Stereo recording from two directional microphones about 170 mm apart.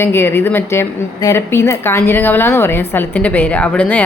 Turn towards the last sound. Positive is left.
turn(degrees=10)  # may be behind; listen again after turning